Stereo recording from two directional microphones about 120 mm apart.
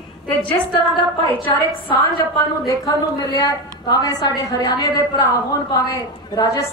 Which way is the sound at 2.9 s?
35° left (ahead or behind).